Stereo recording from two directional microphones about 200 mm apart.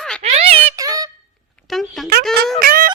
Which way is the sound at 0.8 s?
15° right (ahead or behind).